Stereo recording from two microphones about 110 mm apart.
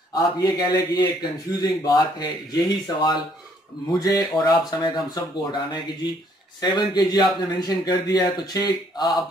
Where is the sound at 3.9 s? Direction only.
35° left (ahead or behind).